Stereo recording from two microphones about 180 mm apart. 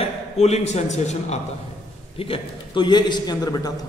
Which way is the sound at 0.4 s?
40° left (ahead or behind).